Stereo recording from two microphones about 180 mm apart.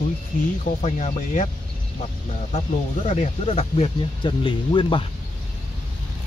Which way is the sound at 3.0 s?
40° left (ahead or behind).